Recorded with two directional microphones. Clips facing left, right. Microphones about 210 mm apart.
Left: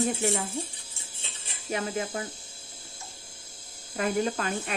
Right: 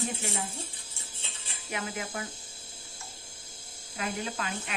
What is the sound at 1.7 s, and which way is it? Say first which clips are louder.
Speech: left 5 dB; 35° left (ahead or behind).